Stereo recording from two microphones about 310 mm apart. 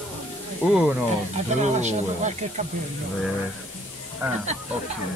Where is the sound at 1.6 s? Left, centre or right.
Right.